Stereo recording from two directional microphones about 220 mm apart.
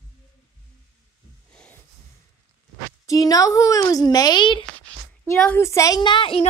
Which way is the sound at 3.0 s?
15° left (ahead or behind).